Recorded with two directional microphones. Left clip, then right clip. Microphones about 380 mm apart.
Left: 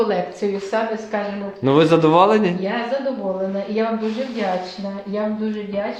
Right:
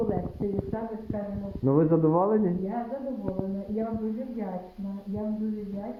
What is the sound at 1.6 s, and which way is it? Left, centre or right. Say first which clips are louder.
Speech: left 9 dB; centre.